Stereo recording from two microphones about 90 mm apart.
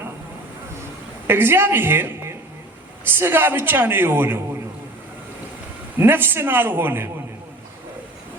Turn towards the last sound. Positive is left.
turn(degrees=-25)  # may be behind; listen again after turning